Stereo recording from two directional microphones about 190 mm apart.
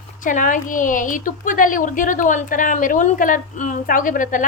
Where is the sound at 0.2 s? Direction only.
45° left (ahead or behind).